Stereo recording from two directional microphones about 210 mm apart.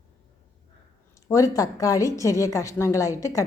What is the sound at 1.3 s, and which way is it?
A woman's voice, 15° left (ahead or behind).